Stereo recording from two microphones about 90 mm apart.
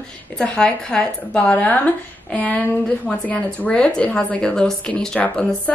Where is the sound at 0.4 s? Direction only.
10° left (ahead or behind).